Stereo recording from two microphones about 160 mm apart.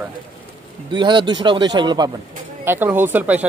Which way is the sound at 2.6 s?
10° right (ahead or behind).